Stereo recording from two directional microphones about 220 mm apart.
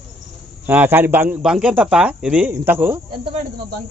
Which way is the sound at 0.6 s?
10° right (ahead or behind).